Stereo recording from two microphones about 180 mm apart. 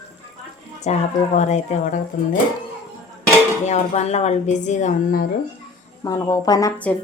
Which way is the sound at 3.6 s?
40° left (ahead or behind).